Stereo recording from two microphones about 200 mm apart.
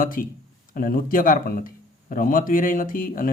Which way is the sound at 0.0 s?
45° left (ahead or behind).